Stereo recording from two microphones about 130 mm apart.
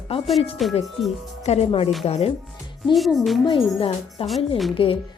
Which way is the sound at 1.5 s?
50° left (ahead or behind).